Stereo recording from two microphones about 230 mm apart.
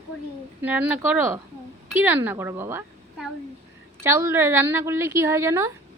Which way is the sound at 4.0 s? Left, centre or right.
Centre.